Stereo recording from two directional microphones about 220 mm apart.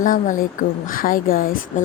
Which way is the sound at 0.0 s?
35° left (ahead or behind).